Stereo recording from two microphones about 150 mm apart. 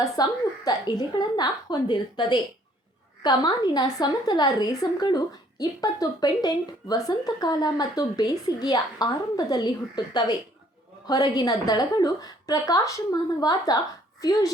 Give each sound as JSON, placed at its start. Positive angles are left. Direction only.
{"t": 0.0, "sound": "a woman's voice", "side_deg": 25}